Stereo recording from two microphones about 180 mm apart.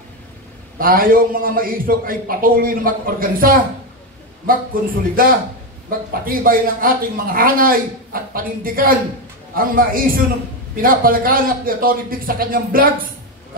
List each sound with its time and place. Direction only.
0.7 s speech: 50° right (ahead or behind)
5.1 s speech: 50° right (ahead or behind)